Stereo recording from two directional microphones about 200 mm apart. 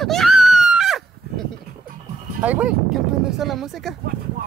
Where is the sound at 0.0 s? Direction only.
Centre (ahead or behind).